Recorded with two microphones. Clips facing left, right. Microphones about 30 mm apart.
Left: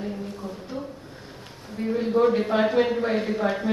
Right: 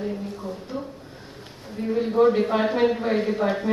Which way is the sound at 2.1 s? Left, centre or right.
Centre.